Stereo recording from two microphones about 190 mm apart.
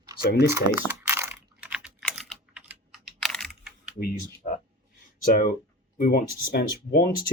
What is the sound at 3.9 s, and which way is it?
Speech, 55° left (ahead or behind).